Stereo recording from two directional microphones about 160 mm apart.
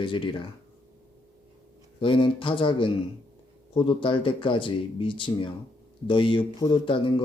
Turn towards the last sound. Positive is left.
turn(degrees=30)  # may be behind; listen again after turning